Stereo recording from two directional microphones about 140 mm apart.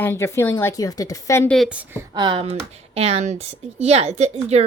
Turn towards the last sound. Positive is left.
turn(degrees=-50)  # may be behind; listen again after turning